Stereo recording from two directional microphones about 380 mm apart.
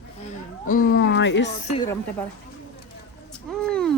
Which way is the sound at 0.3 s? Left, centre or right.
Left.